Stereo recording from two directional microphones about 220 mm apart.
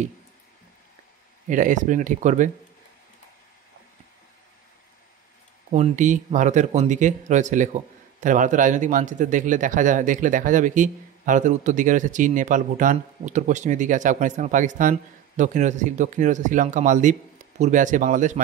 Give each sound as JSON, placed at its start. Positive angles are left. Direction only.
{"t": 1.5, "sound": "speech", "side_deg": -35}
{"t": 5.7, "sound": "speech", "side_deg": -30}